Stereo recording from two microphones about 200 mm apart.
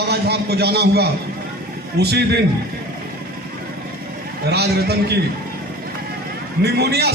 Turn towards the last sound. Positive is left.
turn(degrees=-55)  # may be behind; listen again after turning